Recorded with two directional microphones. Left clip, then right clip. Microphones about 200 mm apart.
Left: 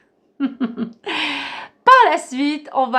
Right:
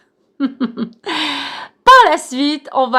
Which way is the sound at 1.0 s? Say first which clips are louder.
Right 3 dB; 20° right (ahead or behind).